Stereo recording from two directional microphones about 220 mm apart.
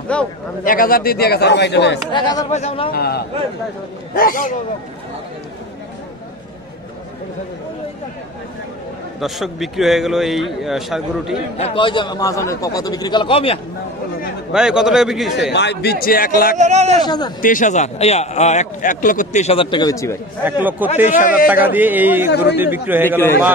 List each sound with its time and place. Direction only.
0.1 s a man's voice: 5° left (ahead or behind)
0.7 s a man's voice: 40° left (ahead or behind)
2.1 s a man's voice: 20° left (ahead or behind)
2.9 s a man's voice: 45° left (ahead or behind)
9.2 s a man's voice: centre (ahead or behind)
11.5 s a man's voice: 25° left (ahead or behind)
14.5 s a man's voice: 5° right (ahead or behind)
15.5 s a man's voice: 50° left (ahead or behind)
16.5 s a man's voice: 30° right (ahead or behind)
17.0 s a man's voice: 20° left (ahead or behind)
17.4 s a man's voice: 35° left (ahead or behind); by 20.2 s 15° left (ahead or behind)
20.9 s a man's voice: 35° left (ahead or behind)
21.5 s a man's voice: 10° right (ahead or behind)
23.0 s a man's voice: 10° left (ahead or behind)